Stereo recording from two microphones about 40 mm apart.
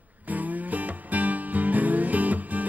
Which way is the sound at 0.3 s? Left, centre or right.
Right.